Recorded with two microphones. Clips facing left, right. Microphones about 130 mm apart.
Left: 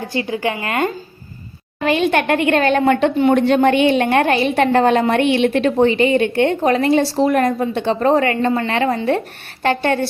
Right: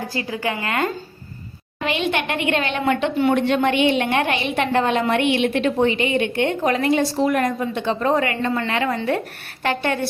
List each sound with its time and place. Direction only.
0.1 s a woman's voice: 25° left (ahead or behind)
1.8 s a woman's voice: 45° left (ahead or behind)